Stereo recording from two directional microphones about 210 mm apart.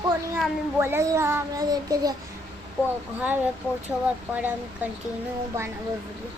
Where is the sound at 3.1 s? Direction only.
10° right (ahead or behind).